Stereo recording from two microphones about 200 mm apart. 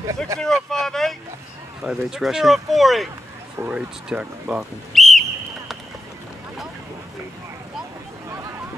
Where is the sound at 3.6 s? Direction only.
5° right (ahead or behind).